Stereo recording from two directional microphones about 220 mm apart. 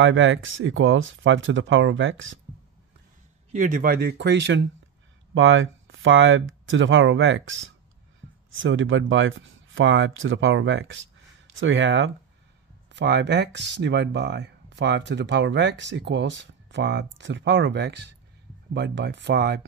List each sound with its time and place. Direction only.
0.0 s speech: 60° right (ahead or behind)
3.5 s speech: 35° right (ahead or behind)